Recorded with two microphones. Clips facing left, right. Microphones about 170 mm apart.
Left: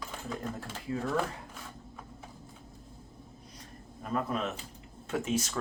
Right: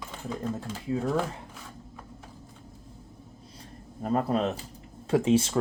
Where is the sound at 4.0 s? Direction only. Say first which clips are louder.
Right 6 dB; 35° right (ahead or behind).